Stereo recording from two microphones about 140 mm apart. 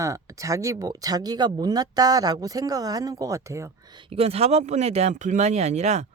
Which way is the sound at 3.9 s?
40° right (ahead or behind).